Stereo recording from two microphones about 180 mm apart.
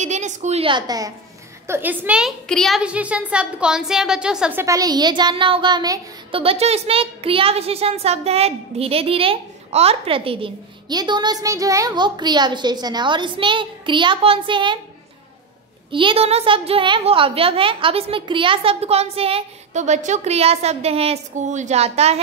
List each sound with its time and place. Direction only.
0.0 s a woman's voice: 40° right (ahead or behind); by 1.1 s 20° right (ahead or behind)
1.7 s a woman's voice: 10° right (ahead or behind); by 14.8 s 25° right (ahead or behind)
15.9 s a woman's voice: 30° right (ahead or behind)